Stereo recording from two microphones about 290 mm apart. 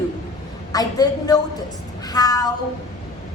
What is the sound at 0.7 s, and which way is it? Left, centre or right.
Speech, centre.